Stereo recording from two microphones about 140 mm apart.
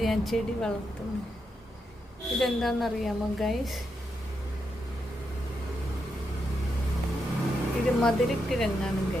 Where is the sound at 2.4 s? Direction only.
Centre (ahead or behind).